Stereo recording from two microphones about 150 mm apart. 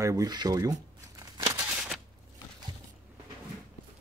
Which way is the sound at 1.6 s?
5° right (ahead or behind).